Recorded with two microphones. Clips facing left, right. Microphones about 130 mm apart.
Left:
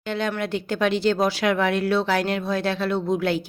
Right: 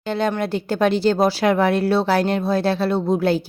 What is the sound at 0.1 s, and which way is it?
Speech, 35° right (ahead or behind).